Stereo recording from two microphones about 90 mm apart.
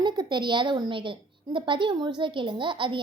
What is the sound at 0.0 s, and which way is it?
A woman's voice, 55° right (ahead or behind).